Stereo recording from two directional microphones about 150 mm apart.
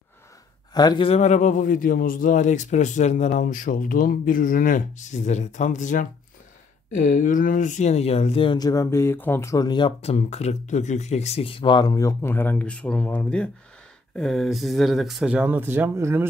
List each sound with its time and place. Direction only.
0.7 s speech: 25° left (ahead or behind)
1.0 s speech: 45° left (ahead or behind); by 10.1 s 30° left (ahead or behind)
10.1 s speech: 45° left (ahead or behind); by 16.3 s 15° right (ahead or behind)